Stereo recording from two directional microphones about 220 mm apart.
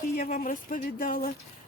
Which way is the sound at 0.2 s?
40° left (ahead or behind).